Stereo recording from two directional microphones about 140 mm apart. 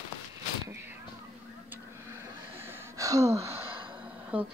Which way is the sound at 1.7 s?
15° right (ahead or behind).